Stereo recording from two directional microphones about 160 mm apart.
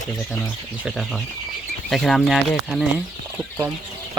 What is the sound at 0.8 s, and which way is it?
Speech, centre (ahead or behind).